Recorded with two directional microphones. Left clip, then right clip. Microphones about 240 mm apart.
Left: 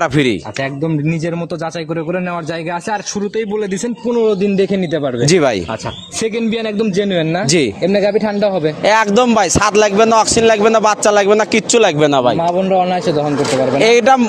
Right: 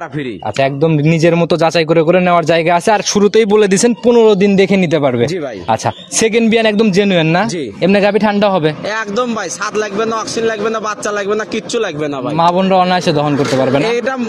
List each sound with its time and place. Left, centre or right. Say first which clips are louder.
0.8 s a man's voice: right 9 dB; right
6.2 s a man's voice: right 7 dB; right
8.8 s a man's voice: left 6 dB; left
12.4 s a man's voice: right 3 dB; right
13.8 s a man's voice: left 6 dB; left